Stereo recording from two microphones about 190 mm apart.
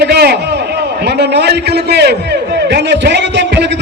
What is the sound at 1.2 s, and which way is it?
A man's voice, 60° right (ahead or behind).